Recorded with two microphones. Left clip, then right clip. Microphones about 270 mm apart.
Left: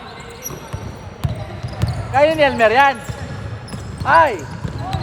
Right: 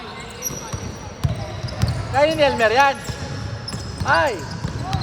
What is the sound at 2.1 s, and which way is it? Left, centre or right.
Speech, left.